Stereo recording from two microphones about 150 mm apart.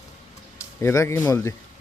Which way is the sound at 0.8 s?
20° left (ahead or behind).